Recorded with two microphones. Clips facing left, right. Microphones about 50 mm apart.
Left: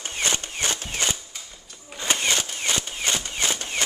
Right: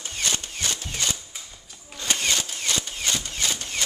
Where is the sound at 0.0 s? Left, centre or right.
Left.